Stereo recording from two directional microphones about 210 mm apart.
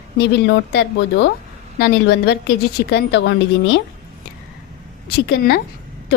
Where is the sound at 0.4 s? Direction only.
55° left (ahead or behind).